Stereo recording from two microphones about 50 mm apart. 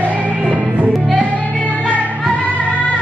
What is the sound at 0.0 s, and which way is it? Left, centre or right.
Music, right.